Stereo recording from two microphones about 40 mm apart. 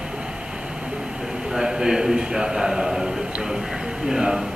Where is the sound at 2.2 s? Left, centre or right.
Centre.